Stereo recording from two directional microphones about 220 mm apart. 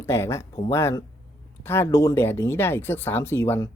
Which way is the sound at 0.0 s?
10° left (ahead or behind).